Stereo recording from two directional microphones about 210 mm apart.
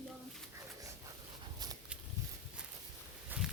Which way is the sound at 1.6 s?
20° right (ahead or behind).